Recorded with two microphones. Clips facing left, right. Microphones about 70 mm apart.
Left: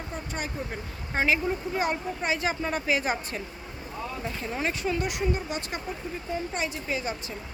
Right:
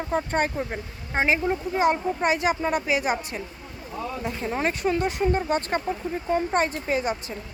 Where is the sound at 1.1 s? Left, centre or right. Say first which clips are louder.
Right 3 dB; right; by 3.2 s centre.